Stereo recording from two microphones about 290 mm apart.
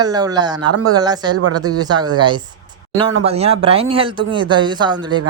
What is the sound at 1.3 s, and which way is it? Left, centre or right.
Speech, right.